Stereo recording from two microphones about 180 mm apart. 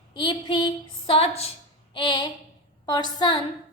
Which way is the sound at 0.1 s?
25° left (ahead or behind).